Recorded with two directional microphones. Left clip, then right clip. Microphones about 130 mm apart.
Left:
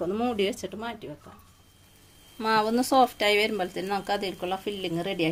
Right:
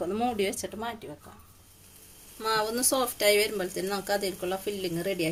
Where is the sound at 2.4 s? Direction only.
75° left (ahead or behind).